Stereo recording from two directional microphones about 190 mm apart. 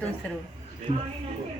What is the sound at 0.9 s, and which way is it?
Speech, 35° right (ahead or behind).